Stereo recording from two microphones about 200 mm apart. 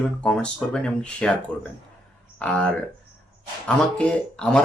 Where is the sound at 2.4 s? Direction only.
5° left (ahead or behind).